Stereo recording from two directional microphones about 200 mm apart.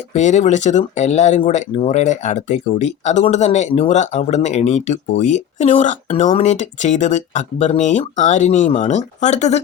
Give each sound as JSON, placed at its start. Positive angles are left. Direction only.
{"t": 0.1, "sound": "speech", "side_deg": 35}